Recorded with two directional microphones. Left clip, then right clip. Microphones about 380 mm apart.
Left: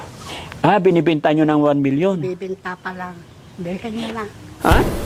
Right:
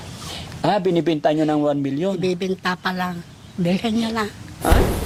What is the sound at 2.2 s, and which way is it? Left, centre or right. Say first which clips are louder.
Speech: right 3 dB; right.